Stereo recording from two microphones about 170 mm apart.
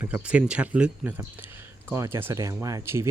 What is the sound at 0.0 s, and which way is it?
Speech, 5° right (ahead or behind).